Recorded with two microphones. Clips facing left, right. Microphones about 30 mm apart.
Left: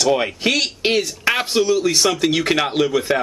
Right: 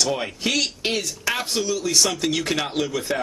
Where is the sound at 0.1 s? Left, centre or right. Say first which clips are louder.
Left 6 dB; left.